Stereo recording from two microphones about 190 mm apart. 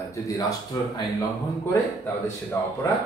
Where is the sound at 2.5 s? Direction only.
15° left (ahead or behind).